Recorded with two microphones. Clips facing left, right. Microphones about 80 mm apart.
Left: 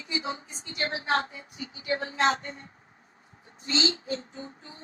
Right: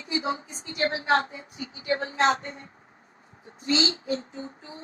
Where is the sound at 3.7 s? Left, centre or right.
Right.